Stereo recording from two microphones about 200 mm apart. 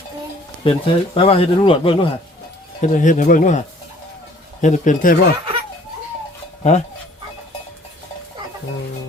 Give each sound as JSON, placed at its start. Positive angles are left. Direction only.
{"t": 0.6, "sound": "a man's voice", "side_deg": 25}
{"t": 2.8, "sound": "speech", "side_deg": 40}
{"t": 4.6, "sound": "speech", "side_deg": 40}
{"t": 6.6, "sound": "speech", "side_deg": 35}